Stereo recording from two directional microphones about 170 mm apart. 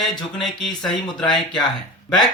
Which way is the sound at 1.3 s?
25° left (ahead or behind).